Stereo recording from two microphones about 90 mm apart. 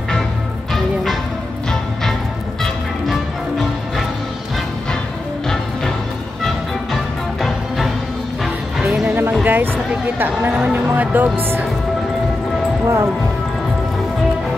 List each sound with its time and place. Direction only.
7.4 s music: centre (ahead or behind)
9.0 s music: 25° right (ahead or behind)
10.1 s speech: 20° right (ahead or behind)
12.8 s speech: 30° right (ahead or behind)